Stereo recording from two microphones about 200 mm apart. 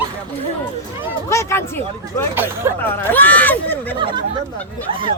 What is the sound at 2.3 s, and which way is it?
Speech, 10° right (ahead or behind).